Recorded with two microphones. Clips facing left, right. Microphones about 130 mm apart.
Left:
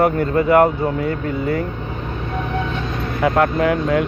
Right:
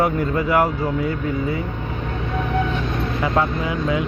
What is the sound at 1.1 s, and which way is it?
Speech, 65° left (ahead or behind).